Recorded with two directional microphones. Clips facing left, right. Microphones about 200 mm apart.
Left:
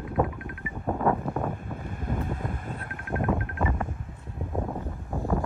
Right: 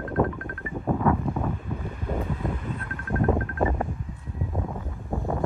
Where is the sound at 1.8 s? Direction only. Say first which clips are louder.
Right 1 dB; 50° left (ahead or behind).